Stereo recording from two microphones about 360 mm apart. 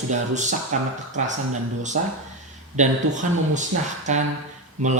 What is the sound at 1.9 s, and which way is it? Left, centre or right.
Speech, right.